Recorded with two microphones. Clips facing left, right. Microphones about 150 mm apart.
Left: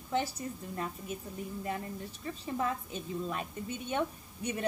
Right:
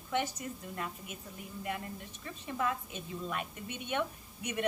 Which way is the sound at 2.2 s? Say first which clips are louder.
Left 1 dB; 35° left (ahead or behind).